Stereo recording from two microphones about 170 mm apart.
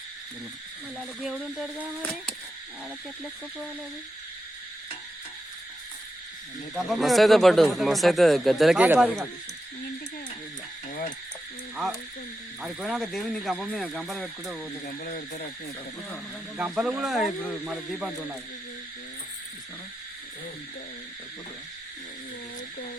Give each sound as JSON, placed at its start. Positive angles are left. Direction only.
{"t": 0.9, "sound": "speech", "side_deg": -5}
{"t": 6.7, "sound": "speech", "side_deg": 0}
{"t": 12.6, "sound": "speech", "side_deg": 0}
{"t": 14.8, "sound": "speech", "side_deg": 50}
{"t": 16.6, "sound": "speech", "side_deg": -5}